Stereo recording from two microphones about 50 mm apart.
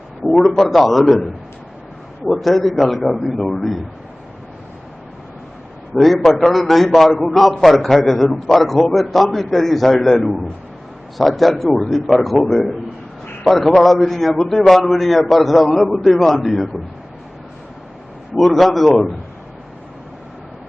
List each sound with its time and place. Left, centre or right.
0.3 s a man's voice: centre
6.0 s a man's voice: centre
13.8 s a man's voice: centre
18.3 s a man's voice: centre